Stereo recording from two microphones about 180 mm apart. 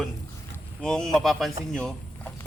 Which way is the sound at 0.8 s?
5° left (ahead or behind).